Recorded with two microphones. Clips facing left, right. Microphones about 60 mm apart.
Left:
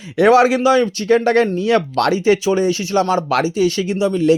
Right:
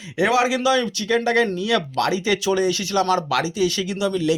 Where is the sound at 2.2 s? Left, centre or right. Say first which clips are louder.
Left 5 dB; left.